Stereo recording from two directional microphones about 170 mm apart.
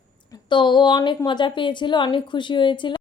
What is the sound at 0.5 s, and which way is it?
Speech, 25° left (ahead or behind).